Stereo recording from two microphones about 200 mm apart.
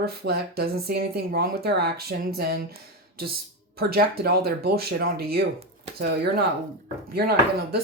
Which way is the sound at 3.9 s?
50° right (ahead or behind).